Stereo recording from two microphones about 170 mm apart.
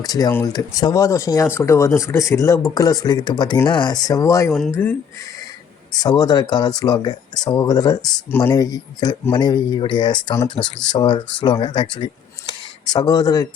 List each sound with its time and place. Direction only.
0.0 s speech: 20° left (ahead or behind)
5.9 s speech: 25° left (ahead or behind)